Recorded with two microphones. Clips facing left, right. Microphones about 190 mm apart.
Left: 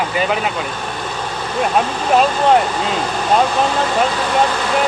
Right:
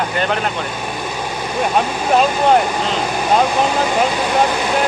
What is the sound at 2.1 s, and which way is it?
Speech, centre (ahead or behind).